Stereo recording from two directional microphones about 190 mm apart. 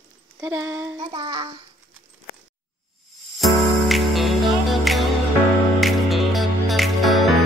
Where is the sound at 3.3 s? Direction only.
Centre (ahead or behind).